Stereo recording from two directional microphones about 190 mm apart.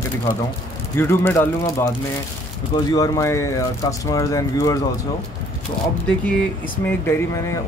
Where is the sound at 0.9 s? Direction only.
10° left (ahead or behind).